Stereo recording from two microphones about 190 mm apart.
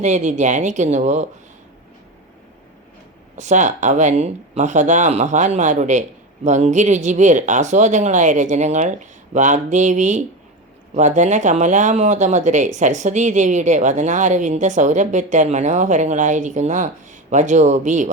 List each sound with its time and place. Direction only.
0.0 s speech: 40° right (ahead or behind)
3.3 s speech: 40° right (ahead or behind)